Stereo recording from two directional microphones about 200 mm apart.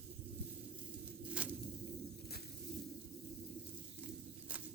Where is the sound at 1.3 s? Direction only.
5° right (ahead or behind).